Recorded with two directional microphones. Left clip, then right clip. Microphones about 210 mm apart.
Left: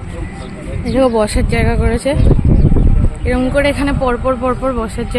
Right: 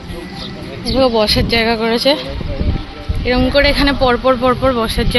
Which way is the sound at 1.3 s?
5° left (ahead or behind).